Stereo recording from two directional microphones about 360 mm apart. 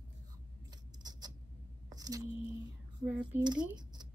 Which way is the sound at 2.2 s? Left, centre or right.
Left.